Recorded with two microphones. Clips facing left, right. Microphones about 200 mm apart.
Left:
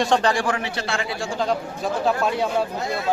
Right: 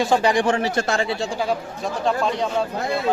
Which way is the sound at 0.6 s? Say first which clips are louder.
Right 6 dB; 40° right (ahead or behind).